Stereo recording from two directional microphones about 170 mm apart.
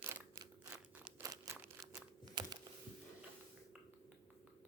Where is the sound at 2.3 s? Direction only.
25° right (ahead or behind).